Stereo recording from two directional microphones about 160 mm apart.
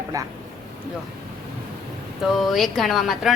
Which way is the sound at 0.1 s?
20° right (ahead or behind).